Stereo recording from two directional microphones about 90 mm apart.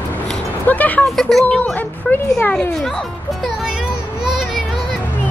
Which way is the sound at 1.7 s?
20° left (ahead or behind).